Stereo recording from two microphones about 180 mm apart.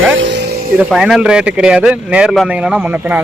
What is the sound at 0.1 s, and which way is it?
Music, 85° right.